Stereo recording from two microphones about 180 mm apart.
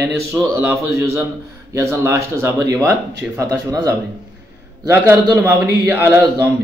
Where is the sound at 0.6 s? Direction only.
15° right (ahead or behind).